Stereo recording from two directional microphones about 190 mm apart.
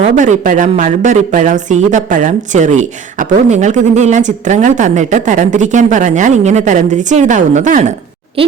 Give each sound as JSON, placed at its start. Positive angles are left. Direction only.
{"t": 0.0, "sound": "a woman's voice", "side_deg": -40}